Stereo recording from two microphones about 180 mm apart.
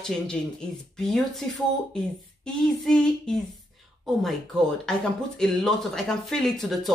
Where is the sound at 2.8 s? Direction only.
5° left (ahead or behind).